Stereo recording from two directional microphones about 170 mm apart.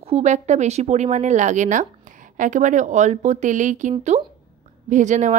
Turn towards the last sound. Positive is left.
turn(degrees=-45)  # may be behind; listen again after turning